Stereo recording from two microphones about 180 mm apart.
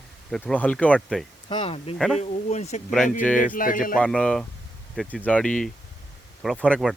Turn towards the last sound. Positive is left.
turn(degrees=0)  # may be behind; listen again after turning